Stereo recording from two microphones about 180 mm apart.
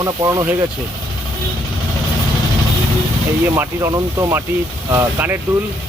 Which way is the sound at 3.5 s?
15° right (ahead or behind).